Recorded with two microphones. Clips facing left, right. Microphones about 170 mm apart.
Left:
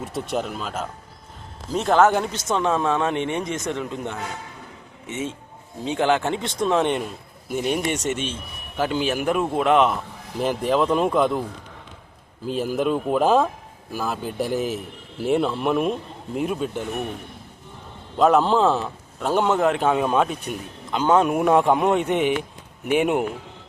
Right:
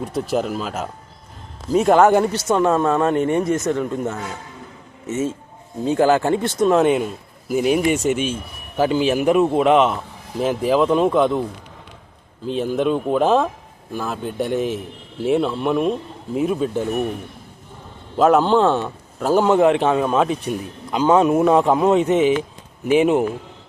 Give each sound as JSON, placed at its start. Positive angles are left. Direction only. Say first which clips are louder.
{"t": 0.0, "sound": "speech", "louder": "right 5 dB", "side_deg": 0}
{"t": 3.2, "sound": "speech", "louder": "right 7 dB", "side_deg": -45}
{"t": 3.7, "sound": "speech", "louder": "right 6 dB", "side_deg": -5}
{"t": 5.8, "sound": "speech", "louder": "right 5 dB", "side_deg": -5}
{"t": 12.5, "sound": "speech", "louder": "right 3 dB", "side_deg": 5}
{"t": 18.2, "sound": "speech", "louder": "right 3 dB", "side_deg": 0}
{"t": 20.9, "sound": "speech", "louder": "right 3 dB", "side_deg": -10}
{"t": 21.2, "sound": "speech", "louder": "right 3 dB", "side_deg": 5}